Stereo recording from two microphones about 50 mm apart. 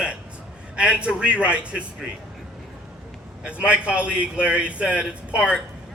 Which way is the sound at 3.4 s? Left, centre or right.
Right.